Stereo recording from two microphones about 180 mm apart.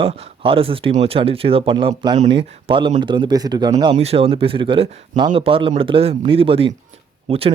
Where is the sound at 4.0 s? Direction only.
35° right (ahead or behind).